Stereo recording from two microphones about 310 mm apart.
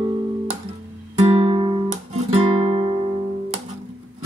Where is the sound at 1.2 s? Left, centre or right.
Centre.